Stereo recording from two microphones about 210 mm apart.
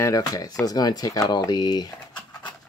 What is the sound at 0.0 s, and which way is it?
Speech, 15° left (ahead or behind).